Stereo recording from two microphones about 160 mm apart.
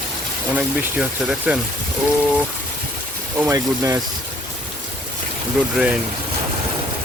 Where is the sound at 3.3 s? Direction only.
20° right (ahead or behind).